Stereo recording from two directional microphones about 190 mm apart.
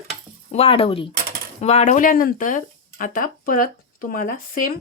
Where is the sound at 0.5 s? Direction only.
30° left (ahead or behind).